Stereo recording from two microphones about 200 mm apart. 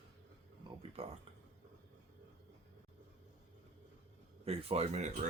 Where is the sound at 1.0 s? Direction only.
30° right (ahead or behind).